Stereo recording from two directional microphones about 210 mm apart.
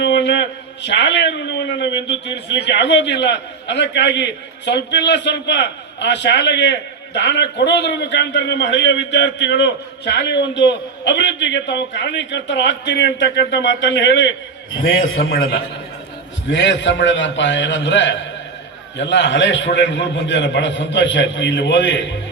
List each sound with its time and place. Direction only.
0.0 s a man's voice: 55° left (ahead or behind)
15.2 s a man's voice: 45° left (ahead or behind)
16.5 s a man's voice: 60° left (ahead or behind)